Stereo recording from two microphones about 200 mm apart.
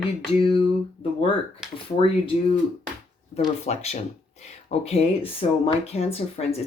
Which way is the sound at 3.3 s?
30° left (ahead or behind).